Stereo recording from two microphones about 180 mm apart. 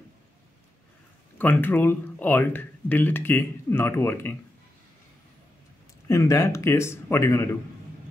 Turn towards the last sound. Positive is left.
turn(degrees=15)  # may be behind; listen again after turning